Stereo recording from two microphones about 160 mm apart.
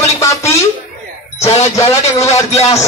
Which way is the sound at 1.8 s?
20° left (ahead or behind).